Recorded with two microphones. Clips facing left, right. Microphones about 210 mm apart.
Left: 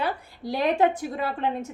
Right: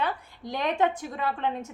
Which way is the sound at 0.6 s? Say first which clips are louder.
Left 4 dB; 35° left (ahead or behind).